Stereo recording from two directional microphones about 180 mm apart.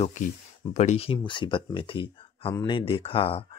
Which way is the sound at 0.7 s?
40° left (ahead or behind).